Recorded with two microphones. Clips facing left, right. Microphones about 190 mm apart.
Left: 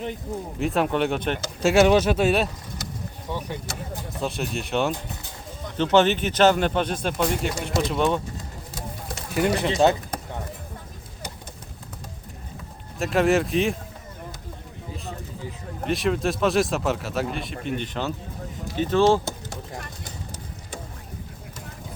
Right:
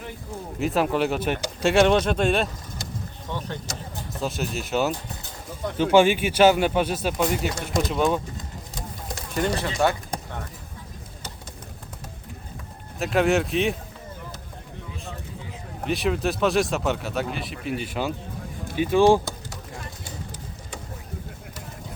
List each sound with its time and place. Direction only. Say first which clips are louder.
0.6 s speech: even; centre (ahead or behind)
1.7 s speech: left 2 dB; 5° left (ahead or behind)
4.2 s speech: even; centre (ahead or behind)
9.3 s speech: left 3 dB; 5° left (ahead or behind)
9.6 s speech: left 6 dB; 25° left (ahead or behind)
13.0 s speech: left 1 dB; centre (ahead or behind)
15.8 s speech: left 1 dB; centre (ahead or behind)